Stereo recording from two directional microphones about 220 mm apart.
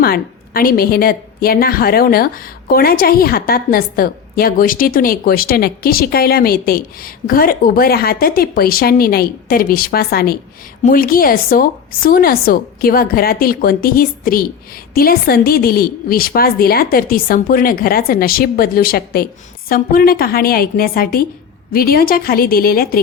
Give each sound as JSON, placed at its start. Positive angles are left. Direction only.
{"t": 0.0, "sound": "a woman's voice", "side_deg": 45}